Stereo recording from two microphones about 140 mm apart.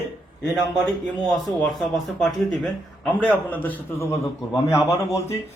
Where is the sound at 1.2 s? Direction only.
Centre (ahead or behind).